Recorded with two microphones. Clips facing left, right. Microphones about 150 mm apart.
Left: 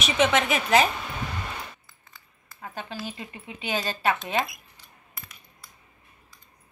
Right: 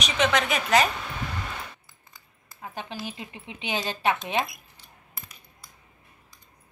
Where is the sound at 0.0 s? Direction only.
5° left (ahead or behind).